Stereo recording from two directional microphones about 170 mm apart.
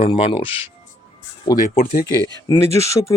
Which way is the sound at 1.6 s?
55° left (ahead or behind).